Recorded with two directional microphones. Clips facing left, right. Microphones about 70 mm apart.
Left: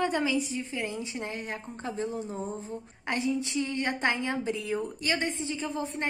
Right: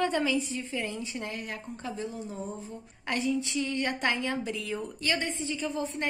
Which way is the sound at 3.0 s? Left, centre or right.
Left.